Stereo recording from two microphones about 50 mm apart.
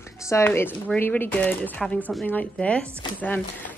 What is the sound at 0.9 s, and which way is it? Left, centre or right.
Speech, left.